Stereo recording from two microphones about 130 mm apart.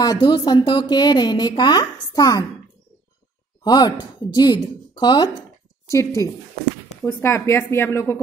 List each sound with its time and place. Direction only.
0.0 s speech: 35° left (ahead or behind)
3.6 s speech: 30° left (ahead or behind)
5.9 s a woman's voice: 25° left (ahead or behind)